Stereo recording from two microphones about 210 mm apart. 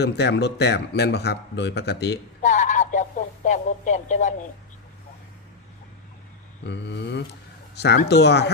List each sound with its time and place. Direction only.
0.0 s speech: 55° left (ahead or behind)
2.4 s radio: 35° left (ahead or behind)
6.7 s speech: 55° left (ahead or behind)